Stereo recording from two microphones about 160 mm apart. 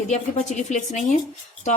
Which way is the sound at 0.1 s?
50° left (ahead or behind).